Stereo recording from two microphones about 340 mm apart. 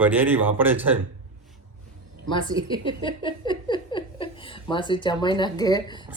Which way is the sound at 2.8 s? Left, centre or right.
Centre.